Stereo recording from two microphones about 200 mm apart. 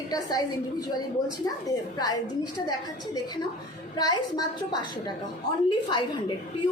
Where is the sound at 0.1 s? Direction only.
20° left (ahead or behind).